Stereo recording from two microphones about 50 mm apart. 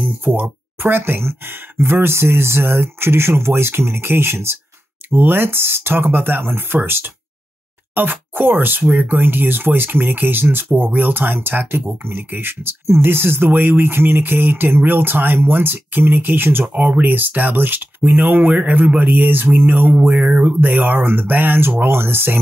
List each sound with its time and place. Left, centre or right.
0.2 s speech: right
5.1 s speech: right
16.6 s speech: right